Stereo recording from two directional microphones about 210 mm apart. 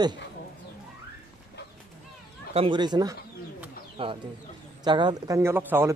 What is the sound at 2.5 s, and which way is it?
A man's voice, 25° right (ahead or behind).